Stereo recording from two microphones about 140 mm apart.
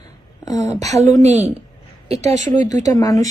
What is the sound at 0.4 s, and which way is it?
Speech, 25° left (ahead or behind).